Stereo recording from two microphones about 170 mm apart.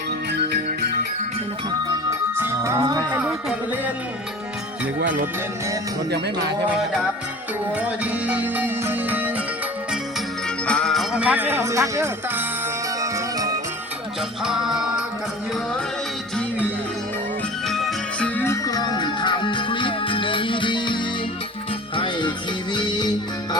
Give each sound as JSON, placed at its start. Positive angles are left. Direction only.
{"t": 0.5, "sound": "music", "side_deg": -65}
{"t": 1.9, "sound": "music", "side_deg": -15}
{"t": 3.1, "sound": "music", "side_deg": -10}
{"t": 7.8, "sound": "music", "side_deg": -10}
{"t": 10.7, "sound": "speech", "side_deg": 5}
{"t": 14.4, "sound": "music", "side_deg": -5}
{"t": 17.7, "sound": "music", "side_deg": 0}
{"t": 18.3, "sound": "music", "side_deg": 15}